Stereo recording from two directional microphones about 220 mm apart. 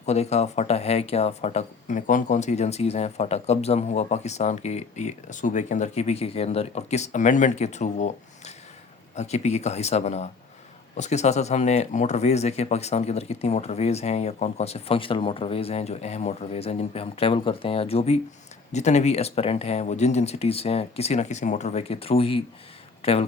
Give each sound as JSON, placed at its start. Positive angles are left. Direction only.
{"t": 0.0, "sound": "speech", "side_deg": 30}